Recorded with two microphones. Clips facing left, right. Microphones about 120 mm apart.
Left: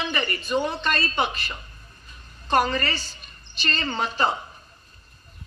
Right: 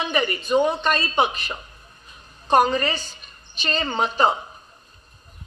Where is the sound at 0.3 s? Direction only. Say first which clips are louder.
Right 6 dB; 15° right (ahead or behind).